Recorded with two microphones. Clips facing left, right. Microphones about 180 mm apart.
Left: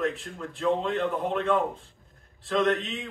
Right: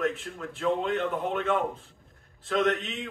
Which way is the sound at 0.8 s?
35° left (ahead or behind).